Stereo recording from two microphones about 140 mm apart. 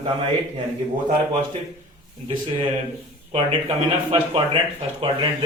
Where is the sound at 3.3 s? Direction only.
40° right (ahead or behind).